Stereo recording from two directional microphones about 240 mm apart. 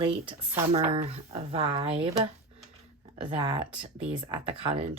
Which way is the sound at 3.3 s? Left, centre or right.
Right.